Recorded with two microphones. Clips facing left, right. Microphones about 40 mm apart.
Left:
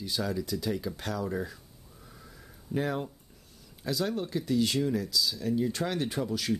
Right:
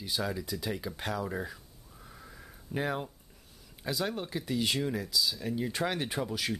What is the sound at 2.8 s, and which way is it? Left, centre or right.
Speech, centre.